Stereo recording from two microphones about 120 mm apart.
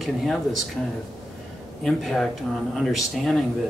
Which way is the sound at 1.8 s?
5° left (ahead or behind).